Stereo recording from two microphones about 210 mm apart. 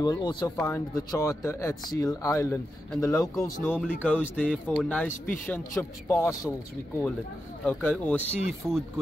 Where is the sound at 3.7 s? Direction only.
5° right (ahead or behind).